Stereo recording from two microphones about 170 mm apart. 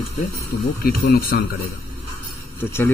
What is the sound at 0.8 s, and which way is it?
Speech, 65° left (ahead or behind).